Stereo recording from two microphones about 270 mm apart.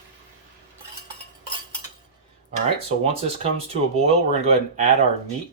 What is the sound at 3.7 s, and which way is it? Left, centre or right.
Speech, right.